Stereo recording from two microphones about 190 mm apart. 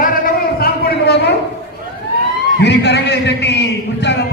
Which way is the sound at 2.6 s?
65° left (ahead or behind).